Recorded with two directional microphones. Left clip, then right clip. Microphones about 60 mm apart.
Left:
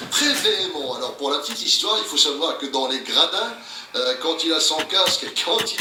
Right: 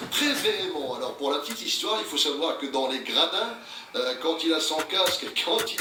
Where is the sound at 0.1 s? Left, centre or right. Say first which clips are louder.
Left 6 dB; right.